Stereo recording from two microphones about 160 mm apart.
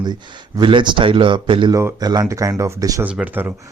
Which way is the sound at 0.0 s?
25° right (ahead or behind).